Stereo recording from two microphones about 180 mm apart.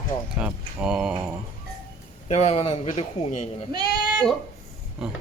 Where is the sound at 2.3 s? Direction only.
35° left (ahead or behind).